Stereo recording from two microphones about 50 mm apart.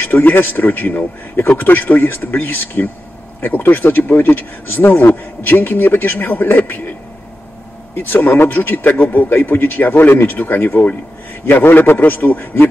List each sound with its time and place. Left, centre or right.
0.0 s speech: left
7.9 s speech: left